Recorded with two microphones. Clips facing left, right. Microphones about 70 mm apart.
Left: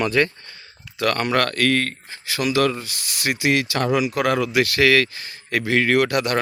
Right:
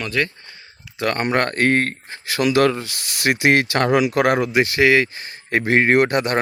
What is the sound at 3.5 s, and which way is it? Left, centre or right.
Speech, right.